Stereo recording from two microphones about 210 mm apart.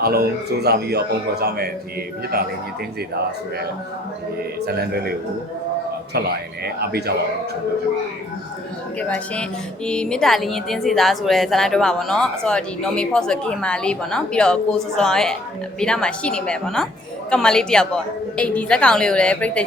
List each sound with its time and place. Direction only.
0.0 s a man's voice: 45° right (ahead or behind)
4.6 s a man's voice: 50° right (ahead or behind)
6.1 s a man's voice: 50° right (ahead or behind)
9.0 s a woman's voice: 5° left (ahead or behind)